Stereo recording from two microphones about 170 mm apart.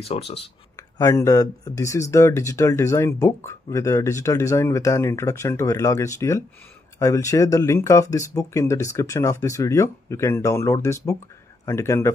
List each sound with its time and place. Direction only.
0.0 s speech: 35° left (ahead or behind)
0.9 s speech: 20° left (ahead or behind)